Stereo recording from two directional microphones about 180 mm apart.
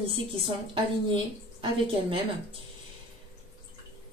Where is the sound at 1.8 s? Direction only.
30° right (ahead or behind).